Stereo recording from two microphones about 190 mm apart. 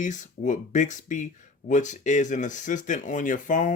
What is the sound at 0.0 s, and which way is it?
Speech, 40° left (ahead or behind).